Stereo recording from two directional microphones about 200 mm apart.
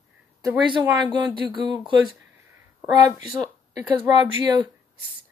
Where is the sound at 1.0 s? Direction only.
20° right (ahead or behind).